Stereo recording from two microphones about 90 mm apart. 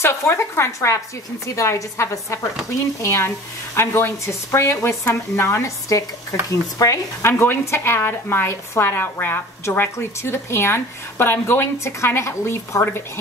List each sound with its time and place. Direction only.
0.0 s speech: 30° left (ahead or behind)